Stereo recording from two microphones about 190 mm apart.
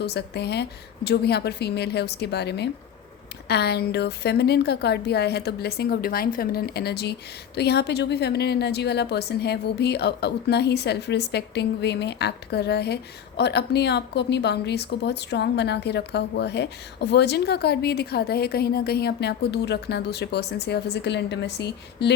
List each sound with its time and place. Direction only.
0.0 s a woman's voice: 60° left (ahead or behind)